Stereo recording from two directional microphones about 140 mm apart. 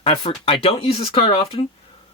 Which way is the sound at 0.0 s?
40° left (ahead or behind).